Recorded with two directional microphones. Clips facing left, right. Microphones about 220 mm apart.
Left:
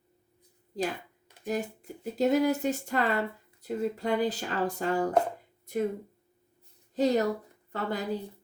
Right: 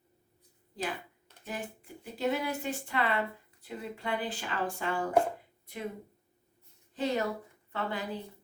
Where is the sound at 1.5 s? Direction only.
40° left (ahead or behind).